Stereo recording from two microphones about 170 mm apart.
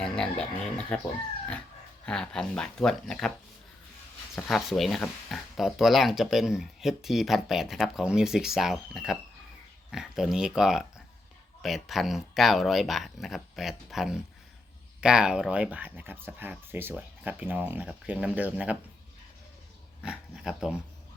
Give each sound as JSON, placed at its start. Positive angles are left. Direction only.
{"t": 0.0, "sound": "a sound", "side_deg": 5}
{"t": 0.9, "sound": "speech", "side_deg": 10}
{"t": 4.4, "sound": "speech", "side_deg": 0}
{"t": 20.0, "sound": "speech", "side_deg": -5}